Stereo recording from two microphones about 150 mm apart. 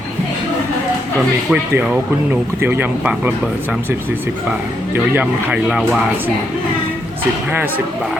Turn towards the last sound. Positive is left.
turn(degrees=-10)  # may be behind; listen again after turning